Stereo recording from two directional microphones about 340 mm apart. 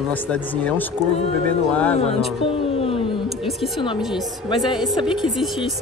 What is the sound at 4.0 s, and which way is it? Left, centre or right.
Speech, centre.